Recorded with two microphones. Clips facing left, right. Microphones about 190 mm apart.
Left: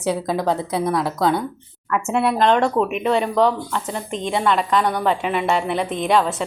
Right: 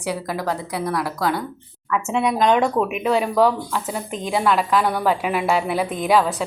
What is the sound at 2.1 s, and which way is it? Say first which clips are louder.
Speech: left 1 dB; 5° left (ahead or behind).